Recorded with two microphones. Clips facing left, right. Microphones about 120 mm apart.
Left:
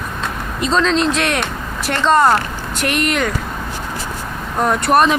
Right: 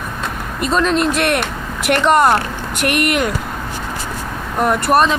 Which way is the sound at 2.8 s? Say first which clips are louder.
Right 2 dB; 55° right (ahead or behind).